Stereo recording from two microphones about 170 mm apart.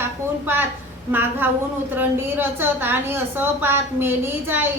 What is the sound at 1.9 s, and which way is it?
Speech, 10° right (ahead or behind).